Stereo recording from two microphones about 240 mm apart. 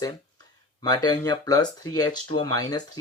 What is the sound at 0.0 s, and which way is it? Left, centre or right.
Speech, centre.